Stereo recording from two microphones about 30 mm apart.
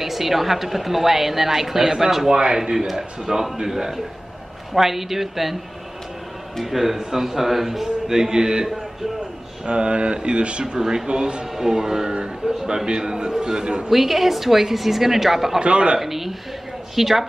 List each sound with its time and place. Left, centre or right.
0.0 s a woman's voice: centre
6.6 s a woman's voice: centre; by 8.6 s right
9.7 s speech: right
10.6 s a man's voice: right
11.5 s a woman's voice: centre
13.8 s a woman's voice: centre
15.6 s speech: right
16.0 s a woman's voice: centre